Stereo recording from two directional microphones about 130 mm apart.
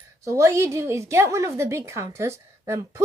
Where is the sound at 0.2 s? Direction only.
25° right (ahead or behind).